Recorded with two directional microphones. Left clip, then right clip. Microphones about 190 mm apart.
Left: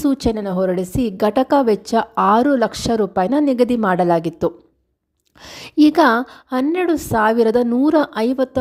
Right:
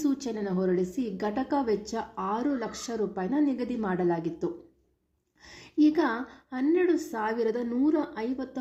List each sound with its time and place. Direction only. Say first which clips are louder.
0.0 s a woman's voice: left 11 dB; 50° left (ahead or behind)